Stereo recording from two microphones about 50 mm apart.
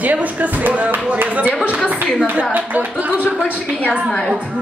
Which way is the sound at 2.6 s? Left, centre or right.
Right.